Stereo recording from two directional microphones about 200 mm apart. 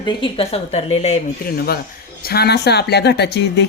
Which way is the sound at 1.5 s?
50° left (ahead or behind).